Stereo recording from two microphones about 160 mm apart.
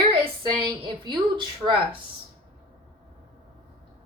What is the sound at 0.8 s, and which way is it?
A woman's voice, 30° right (ahead or behind).